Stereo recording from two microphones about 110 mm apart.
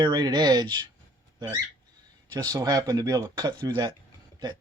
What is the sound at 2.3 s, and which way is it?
Speech, 35° right (ahead or behind).